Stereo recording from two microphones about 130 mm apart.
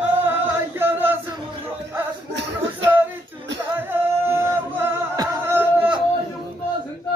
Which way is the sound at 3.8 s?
15° right (ahead or behind).